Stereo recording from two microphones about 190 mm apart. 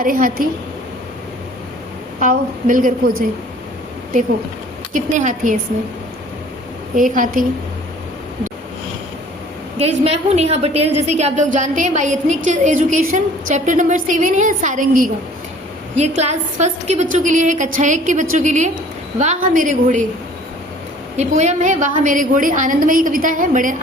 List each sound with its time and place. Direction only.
0.0 s a woman's voice: 45° right (ahead or behind)
2.2 s a woman's voice: 45° right (ahead or behind)
4.9 s a woman's voice: 40° right (ahead or behind)
6.9 s a woman's voice: 45° right (ahead or behind)
9.7 s a woman's voice: 35° right (ahead or behind)
21.2 s a woman's voice: 40° right (ahead or behind)